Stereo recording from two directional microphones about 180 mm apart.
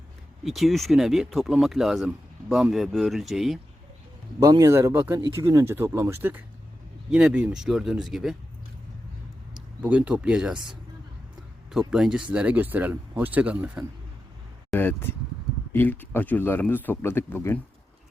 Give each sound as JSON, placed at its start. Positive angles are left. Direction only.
{"t": 0.4, "sound": "speech", "side_deg": 0}
{"t": 4.4, "sound": "speech", "side_deg": -20}
{"t": 9.8, "sound": "speech", "side_deg": -5}
{"t": 14.7, "sound": "speech", "side_deg": 10}